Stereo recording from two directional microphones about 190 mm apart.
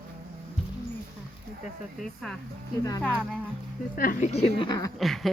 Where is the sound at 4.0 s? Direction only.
45° left (ahead or behind); by 4.9 s 20° left (ahead or behind).